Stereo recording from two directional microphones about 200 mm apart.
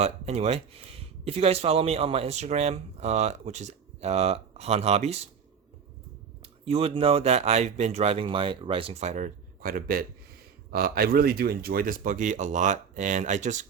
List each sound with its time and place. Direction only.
0.0 s speech: 30° right (ahead or behind)
6.4 s speech: 30° right (ahead or behind)